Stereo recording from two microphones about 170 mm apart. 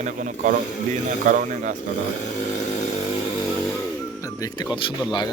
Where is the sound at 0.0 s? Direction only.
50° right (ahead or behind).